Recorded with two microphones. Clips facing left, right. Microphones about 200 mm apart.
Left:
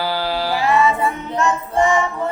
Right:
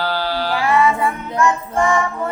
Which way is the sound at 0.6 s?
20° left (ahead or behind).